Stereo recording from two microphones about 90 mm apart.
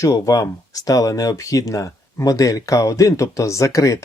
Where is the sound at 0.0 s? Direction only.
35° left (ahead or behind).